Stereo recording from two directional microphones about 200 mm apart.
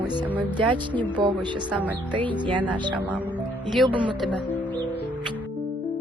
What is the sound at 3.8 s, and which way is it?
Speech, 25° right (ahead or behind).